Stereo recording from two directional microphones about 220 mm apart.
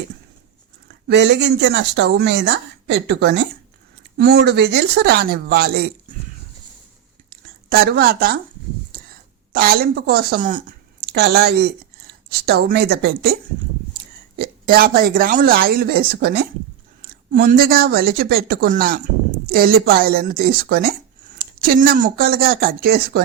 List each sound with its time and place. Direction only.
0.9 s speech: 50° right (ahead or behind)
7.3 s a sound: 45° right (ahead or behind)
9.5 s speech: 40° right (ahead or behind)
14.3 s speech: 40° right (ahead or behind)